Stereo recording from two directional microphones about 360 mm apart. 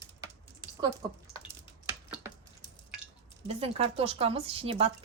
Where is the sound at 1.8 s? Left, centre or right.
Centre.